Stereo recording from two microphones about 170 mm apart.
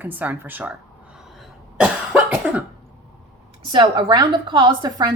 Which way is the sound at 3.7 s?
30° right (ahead or behind).